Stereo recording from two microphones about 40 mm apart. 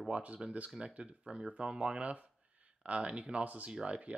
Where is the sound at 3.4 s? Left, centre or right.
Right.